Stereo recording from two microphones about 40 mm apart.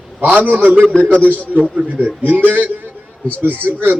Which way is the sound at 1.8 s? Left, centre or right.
Right.